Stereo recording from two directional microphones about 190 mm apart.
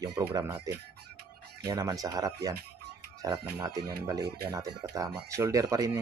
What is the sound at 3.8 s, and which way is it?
Speech, 55° right (ahead or behind).